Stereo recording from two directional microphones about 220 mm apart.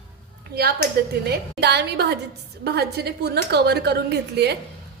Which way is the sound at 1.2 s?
50° right (ahead or behind).